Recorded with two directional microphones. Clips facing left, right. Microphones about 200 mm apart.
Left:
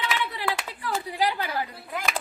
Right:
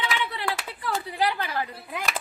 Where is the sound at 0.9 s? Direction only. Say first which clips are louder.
Even; 10° left (ahead or behind).